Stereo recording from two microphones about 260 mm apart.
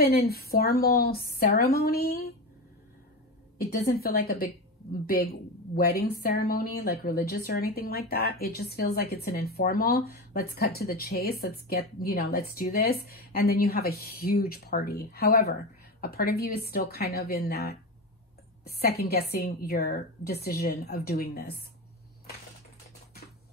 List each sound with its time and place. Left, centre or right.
0.0 s a woman's voice: left
3.8 s a woman's voice: left
5.9 s a woman's voice: left